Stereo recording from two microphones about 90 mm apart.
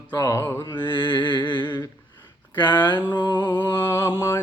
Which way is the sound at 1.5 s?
25° left (ahead or behind).